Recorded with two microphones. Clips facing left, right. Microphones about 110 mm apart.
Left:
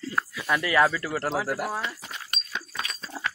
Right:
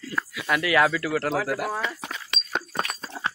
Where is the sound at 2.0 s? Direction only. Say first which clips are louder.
Right 3 dB; 60° right (ahead or behind).